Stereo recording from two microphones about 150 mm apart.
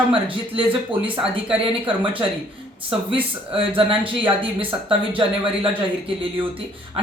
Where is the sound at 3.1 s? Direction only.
35° right (ahead or behind).